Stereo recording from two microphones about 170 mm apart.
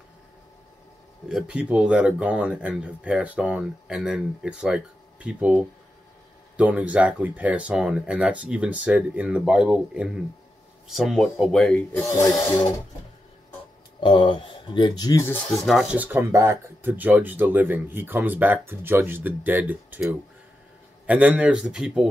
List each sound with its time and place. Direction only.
1.3 s speech: 5° right (ahead or behind)
13.9 s speech: 30° left (ahead or behind)
15.6 s speech: centre (ahead or behind)